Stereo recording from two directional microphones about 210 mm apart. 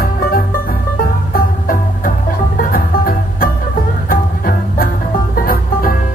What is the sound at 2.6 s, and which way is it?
Music, 45° left (ahead or behind).